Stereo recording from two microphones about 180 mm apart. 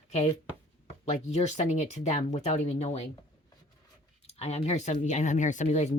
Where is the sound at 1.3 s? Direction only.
40° left (ahead or behind).